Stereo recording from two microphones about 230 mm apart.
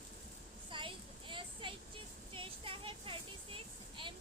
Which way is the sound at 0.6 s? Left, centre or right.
Right.